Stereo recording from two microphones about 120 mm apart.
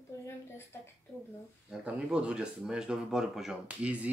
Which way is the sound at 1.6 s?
10° right (ahead or behind).